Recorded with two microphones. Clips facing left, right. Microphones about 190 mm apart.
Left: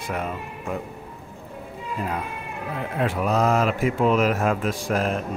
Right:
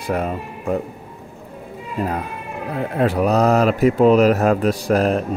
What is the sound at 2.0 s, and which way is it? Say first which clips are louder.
Speech: right 6 dB; 40° right (ahead or behind).